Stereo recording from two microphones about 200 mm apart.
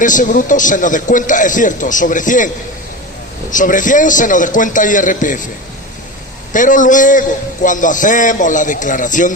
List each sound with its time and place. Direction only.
0.0 s a man's voice: 40° left (ahead or behind)
3.5 s a man's voice: 40° left (ahead or behind)
6.5 s a man's voice: 40° left (ahead or behind)